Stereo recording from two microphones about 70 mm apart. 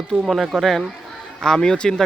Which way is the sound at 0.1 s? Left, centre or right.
Right.